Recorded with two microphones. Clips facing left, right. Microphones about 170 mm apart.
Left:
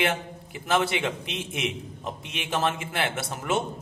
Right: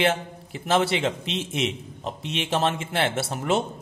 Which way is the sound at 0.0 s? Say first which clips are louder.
Right 3 dB; 30° right (ahead or behind).